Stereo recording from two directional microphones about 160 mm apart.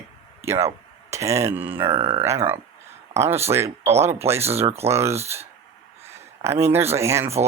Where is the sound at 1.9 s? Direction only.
35° right (ahead or behind).